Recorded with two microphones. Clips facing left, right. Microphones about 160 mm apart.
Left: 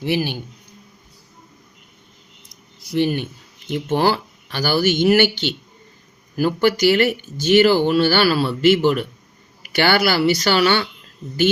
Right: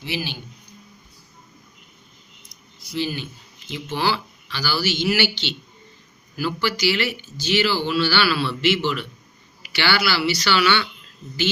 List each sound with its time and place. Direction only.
0.0 s speech: 50° left (ahead or behind)
2.9 s speech: 55° left (ahead or behind)